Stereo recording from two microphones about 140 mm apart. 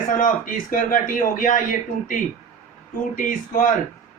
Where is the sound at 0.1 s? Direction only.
70° left (ahead or behind).